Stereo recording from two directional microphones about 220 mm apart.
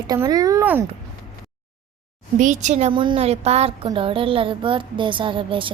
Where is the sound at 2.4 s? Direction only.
35° right (ahead or behind).